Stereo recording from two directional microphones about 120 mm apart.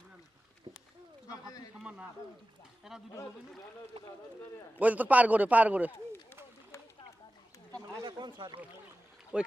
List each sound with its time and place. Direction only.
1.8 s a sound: 10° right (ahead or behind)
2.9 s a man's voice: 5° right (ahead or behind)
3.9 s speech: 60° right (ahead or behind)
4.7 s a man's voice: 15° right (ahead or behind)
8.0 s speech: 40° right (ahead or behind)
9.3 s a man's voice: 10° right (ahead or behind)